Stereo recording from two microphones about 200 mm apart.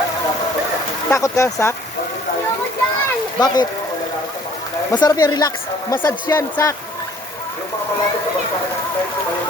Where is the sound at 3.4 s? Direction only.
20° left (ahead or behind).